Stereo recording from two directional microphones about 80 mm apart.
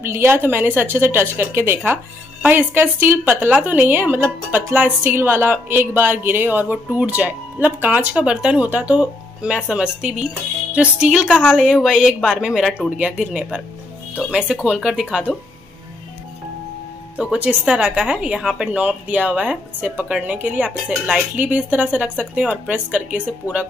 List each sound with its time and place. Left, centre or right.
0.0 s a woman's voice: right; by 15.3 s centre
17.2 s speech: centre
18.8 s a woman's voice: centre